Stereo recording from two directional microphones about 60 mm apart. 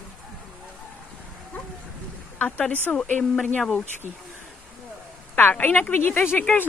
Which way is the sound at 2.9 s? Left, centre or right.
Centre.